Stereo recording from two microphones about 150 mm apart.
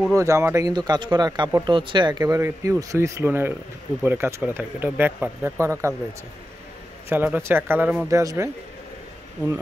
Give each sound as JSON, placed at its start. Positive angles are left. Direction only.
{"t": 0.1, "sound": "speech", "side_deg": -20}
{"t": 7.1, "sound": "speech", "side_deg": -15}
{"t": 8.1, "sound": "speech", "side_deg": -20}